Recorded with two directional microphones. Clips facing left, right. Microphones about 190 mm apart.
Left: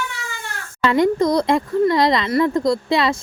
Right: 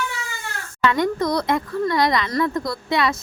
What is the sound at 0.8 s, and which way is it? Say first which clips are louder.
Speech: left 4 dB; 25° left (ahead or behind).